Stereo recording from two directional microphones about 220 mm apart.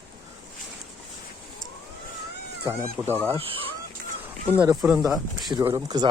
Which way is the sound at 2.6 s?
10° right (ahead or behind).